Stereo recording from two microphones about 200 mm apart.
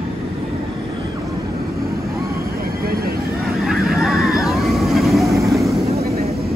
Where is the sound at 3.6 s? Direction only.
Centre (ahead or behind).